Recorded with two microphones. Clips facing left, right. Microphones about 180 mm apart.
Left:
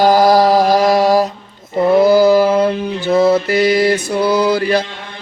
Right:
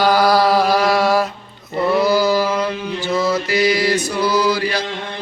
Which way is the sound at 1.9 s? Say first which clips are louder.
Left 7 dB; 50° left (ahead or behind).